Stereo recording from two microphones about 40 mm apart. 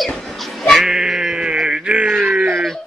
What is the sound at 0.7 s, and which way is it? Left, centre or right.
Sheep, centre.